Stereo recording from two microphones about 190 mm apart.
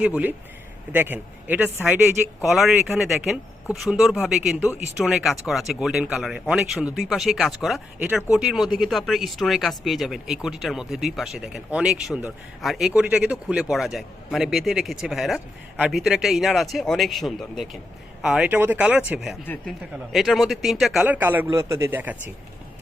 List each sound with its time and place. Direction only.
0.0 s a man's voice: 10° right (ahead or behind)